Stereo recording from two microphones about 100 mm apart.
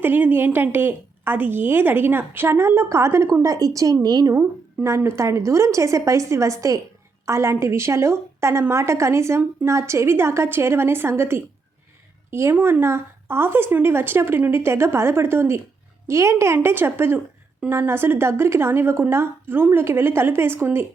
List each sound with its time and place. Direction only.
0.0 s a woman's voice: 20° right (ahead or behind); by 4.4 s 40° right (ahead or behind)
4.4 s a woman's voice: 25° right (ahead or behind)